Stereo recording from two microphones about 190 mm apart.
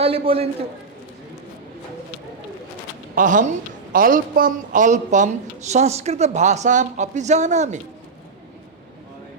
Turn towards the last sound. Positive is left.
turn(degrees=-40)  # may be behind; listen again after turning